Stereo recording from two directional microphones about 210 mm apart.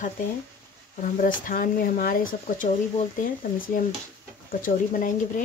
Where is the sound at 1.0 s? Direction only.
40° left (ahead or behind).